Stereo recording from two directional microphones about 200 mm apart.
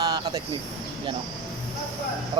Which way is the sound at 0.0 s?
20° right (ahead or behind).